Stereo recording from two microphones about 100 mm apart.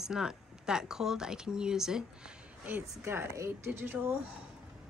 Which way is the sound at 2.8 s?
25° right (ahead or behind).